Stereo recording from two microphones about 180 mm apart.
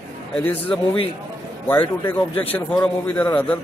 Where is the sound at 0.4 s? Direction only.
10° left (ahead or behind).